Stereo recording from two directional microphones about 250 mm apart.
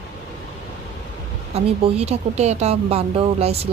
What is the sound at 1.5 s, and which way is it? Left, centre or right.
Speech, right.